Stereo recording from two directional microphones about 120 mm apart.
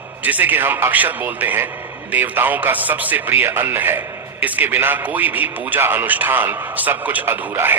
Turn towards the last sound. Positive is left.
turn(degrees=-15)  # may be behind; listen again after turning